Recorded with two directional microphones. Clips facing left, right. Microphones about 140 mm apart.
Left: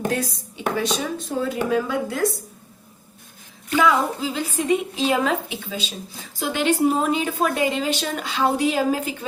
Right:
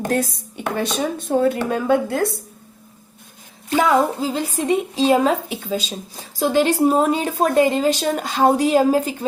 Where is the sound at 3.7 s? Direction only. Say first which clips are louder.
Right 3 dB; 35° right (ahead or behind).